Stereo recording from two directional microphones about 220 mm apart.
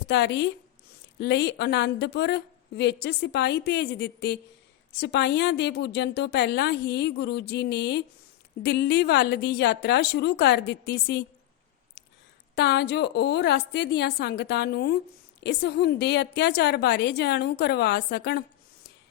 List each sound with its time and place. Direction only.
0.1 s a woman's voice: 50° left (ahead or behind)
12.5 s a woman's voice: 50° left (ahead or behind)